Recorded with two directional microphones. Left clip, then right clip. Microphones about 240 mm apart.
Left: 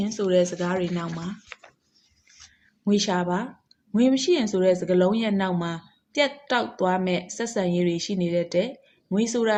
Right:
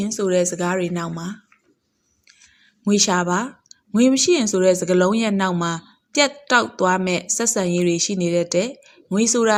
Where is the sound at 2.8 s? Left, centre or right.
Right.